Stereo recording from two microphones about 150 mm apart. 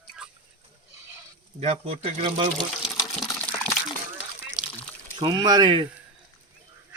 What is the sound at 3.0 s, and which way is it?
Water, 20° left (ahead or behind).